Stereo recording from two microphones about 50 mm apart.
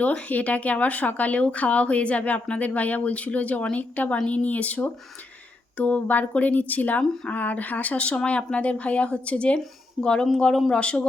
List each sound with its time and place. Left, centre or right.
0.0 s speech: left